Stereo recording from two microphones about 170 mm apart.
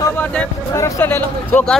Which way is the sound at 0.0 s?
10° left (ahead or behind).